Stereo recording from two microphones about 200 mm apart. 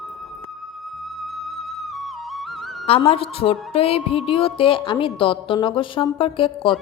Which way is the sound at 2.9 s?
30° left (ahead or behind).